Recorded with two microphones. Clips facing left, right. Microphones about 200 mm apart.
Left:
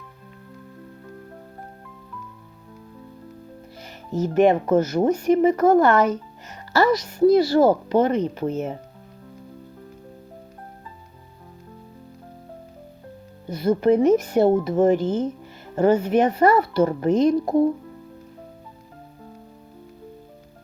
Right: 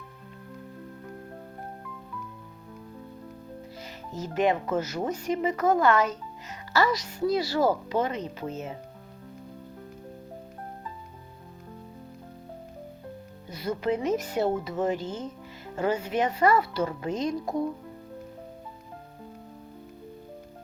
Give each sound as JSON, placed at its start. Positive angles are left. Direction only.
{"t": 4.1, "sound": "speech", "side_deg": 55}
{"t": 13.5, "sound": "speech", "side_deg": 55}